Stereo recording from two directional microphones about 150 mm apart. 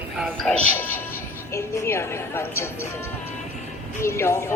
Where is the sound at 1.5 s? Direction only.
15° left (ahead or behind).